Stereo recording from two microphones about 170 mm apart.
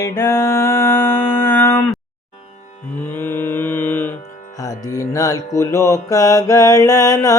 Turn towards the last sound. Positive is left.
turn(degrees=20)  # may be behind; listen again after turning